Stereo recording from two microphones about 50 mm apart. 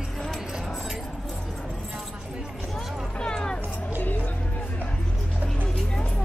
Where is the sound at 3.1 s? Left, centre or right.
Centre.